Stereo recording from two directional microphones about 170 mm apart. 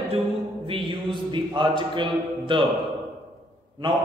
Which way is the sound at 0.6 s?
30° right (ahead or behind).